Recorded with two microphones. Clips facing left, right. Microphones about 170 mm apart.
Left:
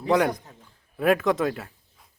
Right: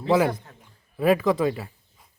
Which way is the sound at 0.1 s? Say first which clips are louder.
Right 1 dB; 5° right (ahead or behind).